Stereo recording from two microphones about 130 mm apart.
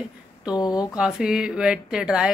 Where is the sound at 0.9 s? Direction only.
5° right (ahead or behind).